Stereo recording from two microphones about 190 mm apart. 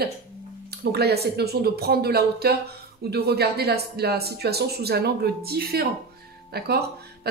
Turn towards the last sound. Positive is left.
turn(degrees=-55)  # may be behind; listen again after turning